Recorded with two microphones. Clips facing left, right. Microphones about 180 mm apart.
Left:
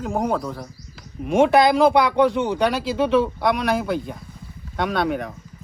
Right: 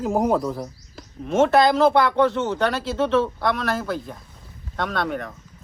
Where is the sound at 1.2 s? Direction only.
15° left (ahead or behind).